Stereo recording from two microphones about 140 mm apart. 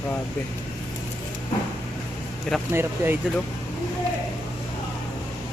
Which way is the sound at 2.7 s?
15° right (ahead or behind).